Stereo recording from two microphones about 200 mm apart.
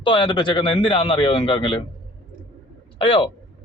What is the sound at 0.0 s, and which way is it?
A man's voice, 25° left (ahead or behind).